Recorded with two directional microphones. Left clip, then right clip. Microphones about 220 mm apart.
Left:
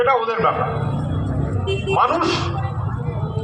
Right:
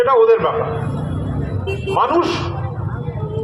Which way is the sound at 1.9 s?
20° left (ahead or behind).